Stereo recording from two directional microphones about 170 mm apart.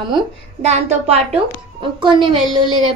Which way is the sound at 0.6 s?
40° right (ahead or behind).